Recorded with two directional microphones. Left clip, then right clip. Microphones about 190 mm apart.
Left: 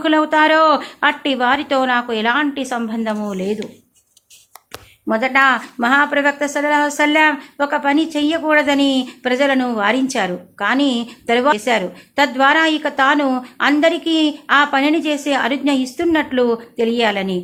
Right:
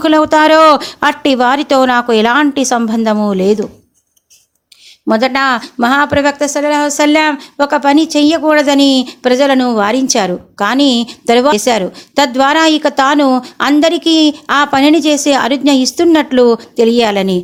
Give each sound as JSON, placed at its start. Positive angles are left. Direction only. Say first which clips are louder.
{"t": 0.0, "sound": "speech", "louder": "right 5 dB", "side_deg": -45}
{"t": 5.0, "sound": "speech", "louder": "right 3 dB", "side_deg": -35}